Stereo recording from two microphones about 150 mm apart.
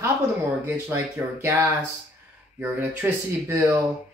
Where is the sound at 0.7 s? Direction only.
10° right (ahead or behind).